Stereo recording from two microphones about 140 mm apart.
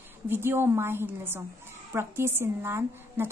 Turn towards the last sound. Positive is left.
turn(degrees=-15)  # may be behind; listen again after turning